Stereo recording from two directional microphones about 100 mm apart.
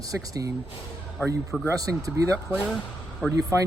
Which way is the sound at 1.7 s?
35° right (ahead or behind).